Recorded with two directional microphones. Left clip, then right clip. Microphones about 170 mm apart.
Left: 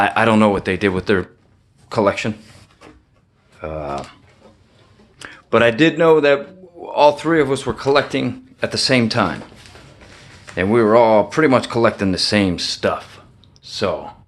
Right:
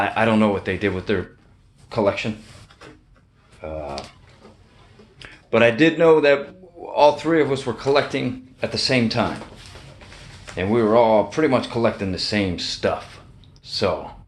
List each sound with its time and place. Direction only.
0.0 s speech: 35° left (ahead or behind)
3.6 s speech: 45° left (ahead or behind)
5.2 s a man's voice: 35° left (ahead or behind)
10.5 s speech: 45° left (ahead or behind); by 14.1 s 25° left (ahead or behind)